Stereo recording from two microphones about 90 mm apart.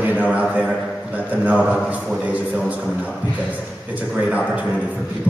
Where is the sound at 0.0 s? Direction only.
20° right (ahead or behind).